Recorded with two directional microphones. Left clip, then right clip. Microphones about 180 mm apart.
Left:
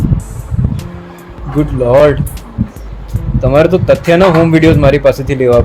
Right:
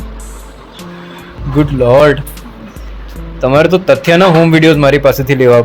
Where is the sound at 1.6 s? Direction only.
15° right (ahead or behind).